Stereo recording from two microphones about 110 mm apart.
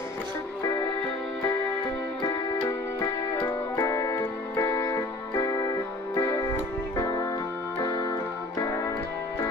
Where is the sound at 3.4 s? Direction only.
30° left (ahead or behind).